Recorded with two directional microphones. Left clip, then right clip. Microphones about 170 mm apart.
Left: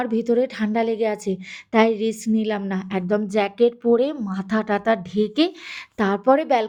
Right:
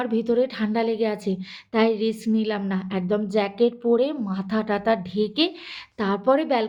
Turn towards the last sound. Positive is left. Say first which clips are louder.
# left 3 dB
turn(degrees=40)  # may be behind; listen again after turning